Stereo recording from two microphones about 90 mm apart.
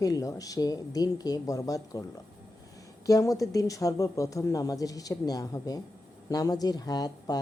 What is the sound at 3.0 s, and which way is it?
A woman's voice, 40° left (ahead or behind).